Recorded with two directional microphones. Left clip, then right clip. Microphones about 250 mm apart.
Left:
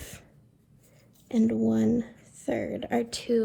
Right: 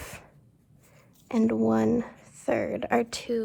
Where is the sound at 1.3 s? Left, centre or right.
Right.